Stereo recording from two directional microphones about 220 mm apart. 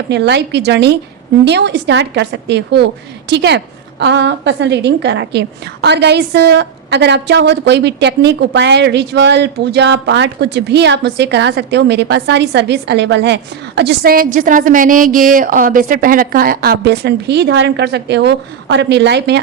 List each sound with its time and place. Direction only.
0.1 s speech: 50° right (ahead or behind)